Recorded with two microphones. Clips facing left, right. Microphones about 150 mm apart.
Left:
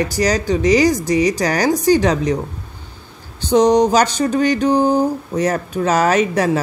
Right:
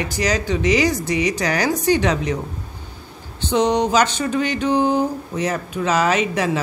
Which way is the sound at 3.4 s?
40° left (ahead or behind).